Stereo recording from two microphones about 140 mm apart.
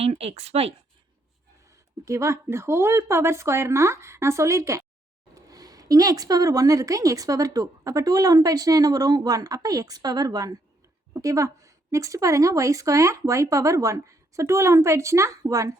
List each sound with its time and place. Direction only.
0.0 s speech: 45° right (ahead or behind)
2.0 s speech: 20° right (ahead or behind)